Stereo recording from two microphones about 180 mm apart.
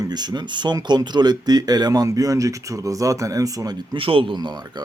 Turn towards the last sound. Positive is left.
turn(degrees=-25)  # may be behind; listen again after turning